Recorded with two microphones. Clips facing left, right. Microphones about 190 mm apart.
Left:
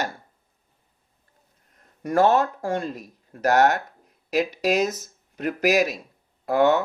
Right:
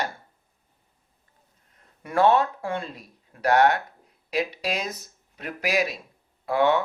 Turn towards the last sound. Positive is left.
turn(degrees=45)  # may be behind; listen again after turning